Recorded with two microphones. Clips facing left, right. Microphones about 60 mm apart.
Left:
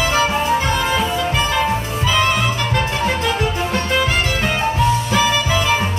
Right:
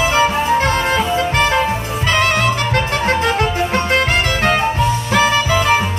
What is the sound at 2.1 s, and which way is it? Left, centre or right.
Music, right.